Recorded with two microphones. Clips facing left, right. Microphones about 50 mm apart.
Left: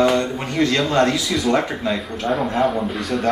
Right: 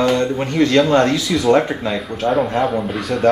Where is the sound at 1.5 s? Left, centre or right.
Centre.